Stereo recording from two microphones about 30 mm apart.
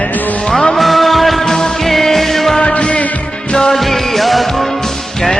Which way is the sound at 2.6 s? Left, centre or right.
Left.